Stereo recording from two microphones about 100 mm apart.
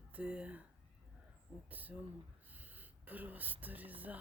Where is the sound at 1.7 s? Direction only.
15° right (ahead or behind).